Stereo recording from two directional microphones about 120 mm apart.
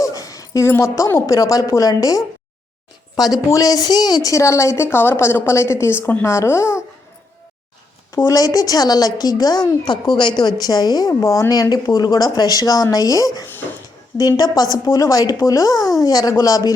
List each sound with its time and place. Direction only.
0.0 s a woman's voice: 30° left (ahead or behind)
8.1 s a woman's voice: 25° left (ahead or behind)